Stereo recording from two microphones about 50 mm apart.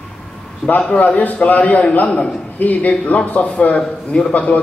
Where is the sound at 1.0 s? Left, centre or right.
Left.